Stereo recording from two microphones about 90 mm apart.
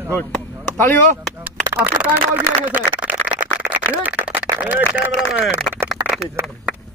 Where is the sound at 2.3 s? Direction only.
20° right (ahead or behind).